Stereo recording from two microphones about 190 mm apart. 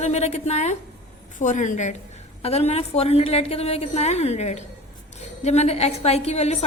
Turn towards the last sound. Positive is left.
turn(degrees=35)  # may be behind; listen again after turning